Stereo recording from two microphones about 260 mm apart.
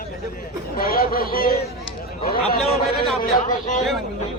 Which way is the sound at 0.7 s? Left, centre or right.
Left.